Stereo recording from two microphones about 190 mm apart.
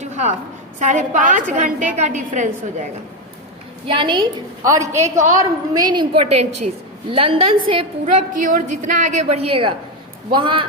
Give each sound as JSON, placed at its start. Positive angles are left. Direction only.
{"t": 0.0, "sound": "a sound", "side_deg": -35}
{"t": 0.8, "sound": "a woman's voice", "side_deg": -40}
{"t": 3.8, "sound": "a woman's voice", "side_deg": -25}
{"t": 8.0, "sound": "a woman's voice", "side_deg": -45}